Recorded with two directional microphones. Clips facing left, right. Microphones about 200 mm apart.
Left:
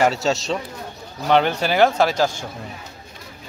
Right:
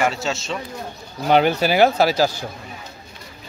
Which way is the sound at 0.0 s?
40° left (ahead or behind).